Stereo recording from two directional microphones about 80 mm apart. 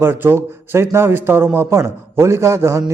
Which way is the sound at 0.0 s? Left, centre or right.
Right.